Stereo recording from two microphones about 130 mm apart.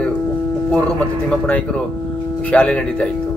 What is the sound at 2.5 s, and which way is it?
Speech, 10° left (ahead or behind).